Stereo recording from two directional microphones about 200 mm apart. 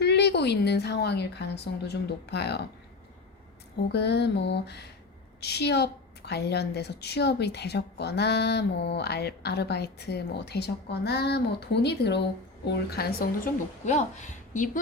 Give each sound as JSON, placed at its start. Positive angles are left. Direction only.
{"t": 0.0, "sound": "a woman's voice", "side_deg": 55}
{"t": 3.9, "sound": "a woman's voice", "side_deg": 55}